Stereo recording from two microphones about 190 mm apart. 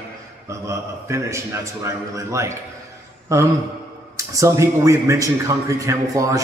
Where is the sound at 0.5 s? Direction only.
15° right (ahead or behind).